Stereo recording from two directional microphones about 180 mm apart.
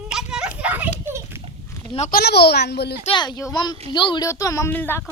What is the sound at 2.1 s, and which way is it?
Speech, 60° left (ahead or behind).